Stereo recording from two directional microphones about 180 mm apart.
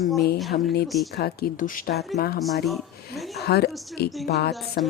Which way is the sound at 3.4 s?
65° left (ahead or behind).